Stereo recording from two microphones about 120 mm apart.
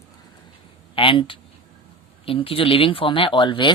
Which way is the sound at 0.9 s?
45° left (ahead or behind).